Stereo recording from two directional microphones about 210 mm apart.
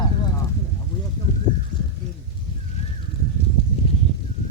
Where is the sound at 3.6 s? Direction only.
30° left (ahead or behind).